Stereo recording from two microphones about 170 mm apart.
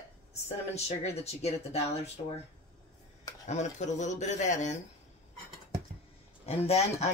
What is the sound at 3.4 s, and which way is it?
Speech, 45° left (ahead or behind).